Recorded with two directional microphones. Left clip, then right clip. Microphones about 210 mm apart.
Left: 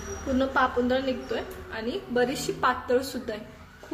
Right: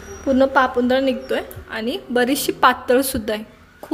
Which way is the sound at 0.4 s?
45° right (ahead or behind).